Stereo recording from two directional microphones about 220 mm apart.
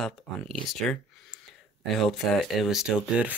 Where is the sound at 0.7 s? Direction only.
5° left (ahead or behind).